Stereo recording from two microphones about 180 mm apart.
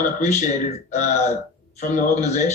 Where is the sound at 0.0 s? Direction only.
40° left (ahead or behind).